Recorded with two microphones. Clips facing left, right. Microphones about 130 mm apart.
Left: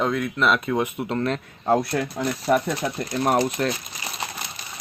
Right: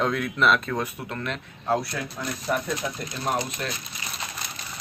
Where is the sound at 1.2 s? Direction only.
40° left (ahead or behind).